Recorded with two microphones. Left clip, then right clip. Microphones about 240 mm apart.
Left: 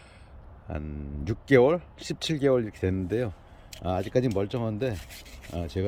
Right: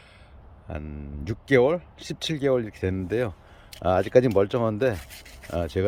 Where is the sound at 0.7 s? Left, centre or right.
Centre.